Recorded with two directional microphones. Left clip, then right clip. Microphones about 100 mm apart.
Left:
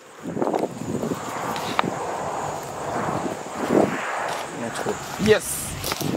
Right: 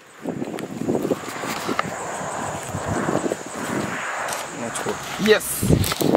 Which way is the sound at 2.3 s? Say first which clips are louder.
Even; 50° right (ahead or behind).